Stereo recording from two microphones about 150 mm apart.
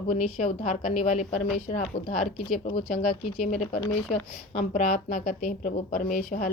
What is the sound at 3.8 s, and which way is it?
Speech, 40° left (ahead or behind).